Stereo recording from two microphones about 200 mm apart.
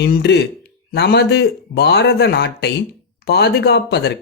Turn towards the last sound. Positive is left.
turn(degrees=55)  # may be behind; listen again after turning